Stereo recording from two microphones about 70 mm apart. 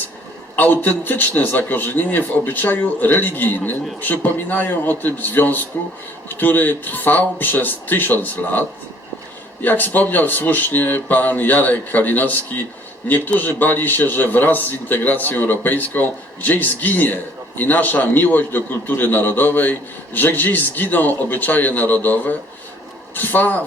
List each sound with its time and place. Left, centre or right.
0.5 s a man's voice: left